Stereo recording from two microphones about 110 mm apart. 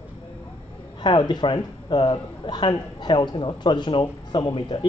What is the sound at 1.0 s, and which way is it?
A man's voice, 45° left (ahead or behind).